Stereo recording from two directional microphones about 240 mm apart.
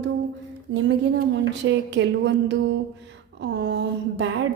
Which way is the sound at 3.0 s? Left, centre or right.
Right.